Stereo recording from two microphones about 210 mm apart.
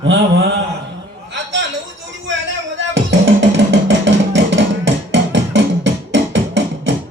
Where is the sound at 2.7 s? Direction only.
60° right (ahead or behind).